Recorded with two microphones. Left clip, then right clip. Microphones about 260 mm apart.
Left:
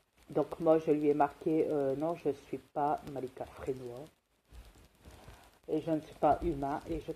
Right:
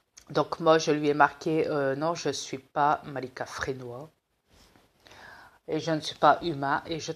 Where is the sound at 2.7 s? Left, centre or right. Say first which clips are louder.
Right 8 dB; right.